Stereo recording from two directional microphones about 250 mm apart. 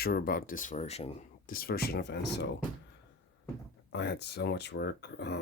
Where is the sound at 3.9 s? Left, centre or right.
Left.